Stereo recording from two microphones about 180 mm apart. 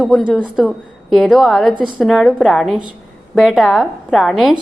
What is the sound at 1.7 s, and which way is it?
Speech, 25° right (ahead or behind).